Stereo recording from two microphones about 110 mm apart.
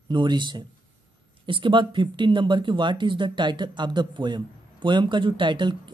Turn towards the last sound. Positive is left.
turn(degrees=-45)  # may be behind; listen again after turning